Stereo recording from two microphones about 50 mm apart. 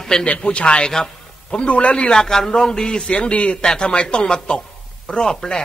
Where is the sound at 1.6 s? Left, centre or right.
Left.